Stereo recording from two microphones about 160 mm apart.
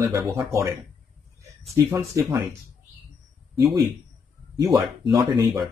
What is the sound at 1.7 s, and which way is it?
Speech, 15° right (ahead or behind).